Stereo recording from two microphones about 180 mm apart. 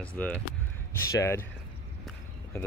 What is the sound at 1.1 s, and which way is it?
Speech, 15° left (ahead or behind).